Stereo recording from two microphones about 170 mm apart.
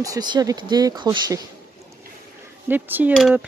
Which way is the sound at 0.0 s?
20° right (ahead or behind).